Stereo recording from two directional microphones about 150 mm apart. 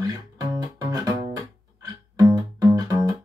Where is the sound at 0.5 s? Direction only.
25° right (ahead or behind).